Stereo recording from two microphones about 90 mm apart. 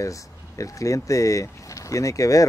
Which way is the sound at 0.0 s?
35° left (ahead or behind).